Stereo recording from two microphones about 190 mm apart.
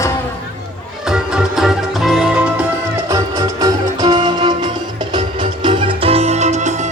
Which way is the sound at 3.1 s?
20° right (ahead or behind).